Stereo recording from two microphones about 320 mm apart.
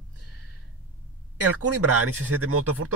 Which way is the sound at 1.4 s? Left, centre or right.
Right.